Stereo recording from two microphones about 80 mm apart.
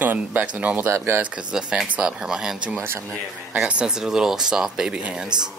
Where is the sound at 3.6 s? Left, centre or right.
Centre.